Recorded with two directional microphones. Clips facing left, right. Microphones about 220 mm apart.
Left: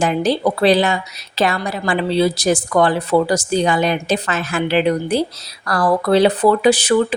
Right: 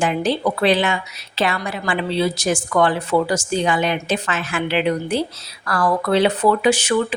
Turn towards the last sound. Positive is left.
turn(degrees=35)  # may be behind; listen again after turning